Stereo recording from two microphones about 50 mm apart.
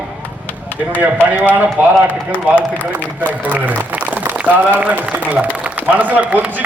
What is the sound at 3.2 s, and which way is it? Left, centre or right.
A man's voice, right.